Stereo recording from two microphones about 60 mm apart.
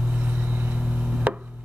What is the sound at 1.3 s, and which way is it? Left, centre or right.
Chopping, right.